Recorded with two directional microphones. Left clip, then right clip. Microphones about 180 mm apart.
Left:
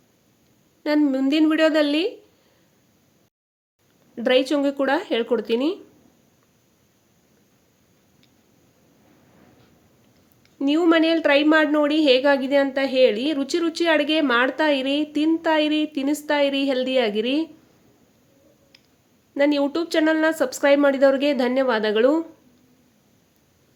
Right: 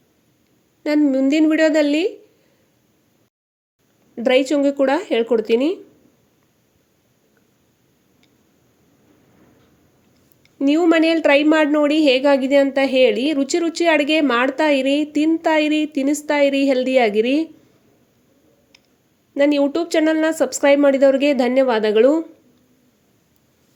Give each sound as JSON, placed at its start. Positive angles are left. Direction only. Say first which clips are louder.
{"t": 0.9, "sound": "speech", "louder": "right 4 dB", "side_deg": -15}
{"t": 4.1, "sound": "speech", "louder": "right 3 dB", "side_deg": -15}
{"t": 10.4, "sound": "a woman's voice", "louder": "right 3 dB", "side_deg": -20}
{"t": 19.3, "sound": "a woman's voice", "louder": "right 4 dB", "side_deg": -15}